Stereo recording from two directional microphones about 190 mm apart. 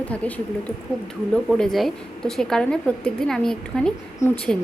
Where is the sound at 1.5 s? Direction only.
Centre (ahead or behind).